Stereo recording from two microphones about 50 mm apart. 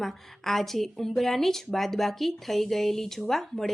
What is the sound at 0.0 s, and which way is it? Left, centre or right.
Speech, centre.